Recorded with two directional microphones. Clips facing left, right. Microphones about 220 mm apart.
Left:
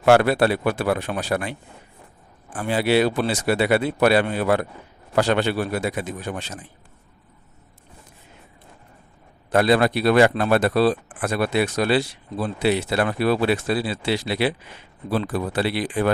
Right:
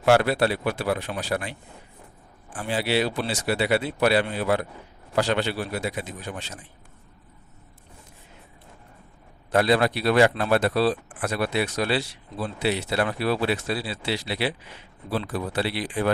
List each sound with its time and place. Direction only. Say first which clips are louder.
0.0 s speech: left 4 dB; 55° left (ahead or behind)
9.5 s speech: left 3 dB; 50° left (ahead or behind)